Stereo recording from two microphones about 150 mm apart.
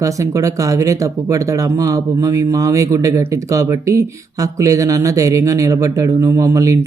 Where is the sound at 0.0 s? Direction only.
20° right (ahead or behind).